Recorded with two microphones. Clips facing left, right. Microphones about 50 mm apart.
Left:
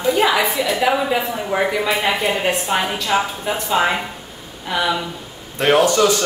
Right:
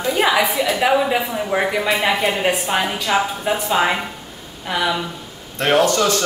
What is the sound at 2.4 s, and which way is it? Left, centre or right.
Speech, centre.